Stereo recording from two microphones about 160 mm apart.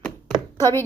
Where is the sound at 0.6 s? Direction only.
15° left (ahead or behind).